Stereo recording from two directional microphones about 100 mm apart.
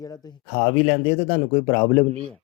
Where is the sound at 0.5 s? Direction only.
70° left (ahead or behind).